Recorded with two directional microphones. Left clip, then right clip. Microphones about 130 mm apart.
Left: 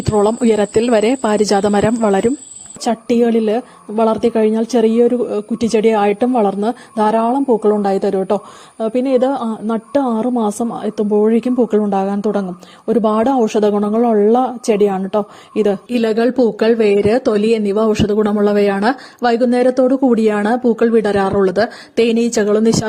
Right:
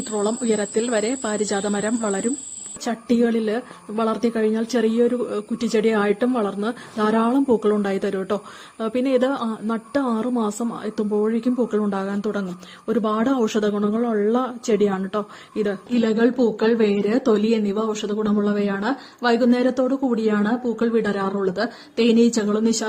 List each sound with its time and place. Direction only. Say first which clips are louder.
0.0 s speech: left 10 dB; 65° left (ahead or behind)
2.8 s a woman's voice: left 7 dB; 40° left (ahead or behind)
7.3 s a woman's voice: left 5 dB; 20° left (ahead or behind)
11.3 s a woman's voice: left 7 dB; 45° left (ahead or behind)
11.8 s a woman's voice: left 8 dB; 30° left (ahead or behind)
13.3 s speech: left 7 dB; 30° left (ahead or behind)
13.7 s a woman's voice: left 8 dB; 45° left (ahead or behind)
15.9 s a woman's voice: left 5 dB; 55° left (ahead or behind)